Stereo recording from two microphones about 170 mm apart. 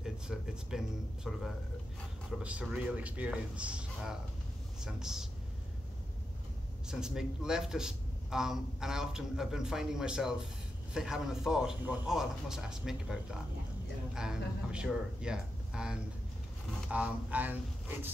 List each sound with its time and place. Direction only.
0.0 s a man's voice: 5° right (ahead or behind)
6.9 s a man's voice: 5° right (ahead or behind)